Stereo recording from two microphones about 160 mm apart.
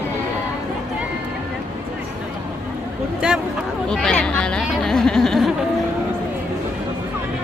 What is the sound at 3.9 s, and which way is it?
Speech, 5° left (ahead or behind).